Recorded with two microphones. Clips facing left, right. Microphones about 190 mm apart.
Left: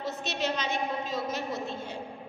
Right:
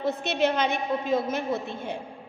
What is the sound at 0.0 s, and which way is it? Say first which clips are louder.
A woman's voice: right 7 dB; 55° right (ahead or behind).